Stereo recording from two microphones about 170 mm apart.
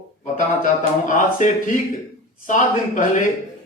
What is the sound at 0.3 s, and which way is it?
Speech, 50° left (ahead or behind).